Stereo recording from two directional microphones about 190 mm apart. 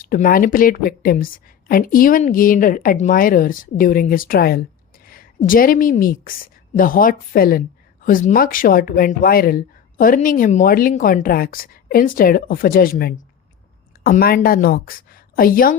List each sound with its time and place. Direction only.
0.0 s a woman's voice: 50° left (ahead or behind)